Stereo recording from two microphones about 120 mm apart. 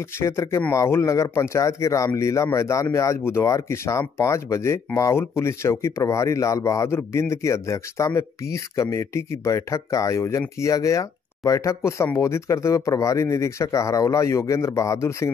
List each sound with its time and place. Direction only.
0.2 s speech: 25° left (ahead or behind)